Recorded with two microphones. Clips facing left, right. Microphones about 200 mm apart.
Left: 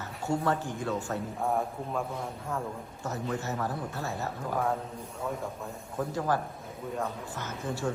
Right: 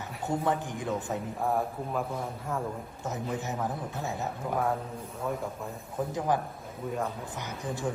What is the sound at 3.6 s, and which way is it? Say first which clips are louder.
Speech: even; 20° right (ahead or behind).